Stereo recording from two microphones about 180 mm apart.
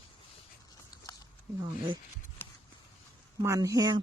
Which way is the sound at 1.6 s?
25° right (ahead or behind).